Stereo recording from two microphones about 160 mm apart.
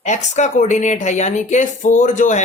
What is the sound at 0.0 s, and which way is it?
Speech, 45° left (ahead or behind).